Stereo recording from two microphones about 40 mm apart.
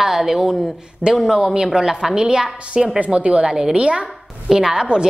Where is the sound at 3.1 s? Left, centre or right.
Right.